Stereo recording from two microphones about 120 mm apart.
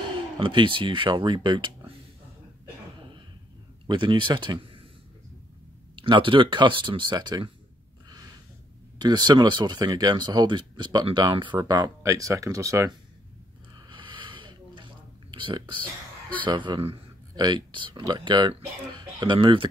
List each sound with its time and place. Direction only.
0.4 s speech: 45° right (ahead or behind)
3.8 s speech: 40° right (ahead or behind)
5.9 s speech: 45° right (ahead or behind)
8.9 s speech: 35° right (ahead or behind)
13.8 s a sound: 40° right (ahead or behind)
15.3 s speech: 40° right (ahead or behind)
17.4 s speech: 35° right (ahead or behind)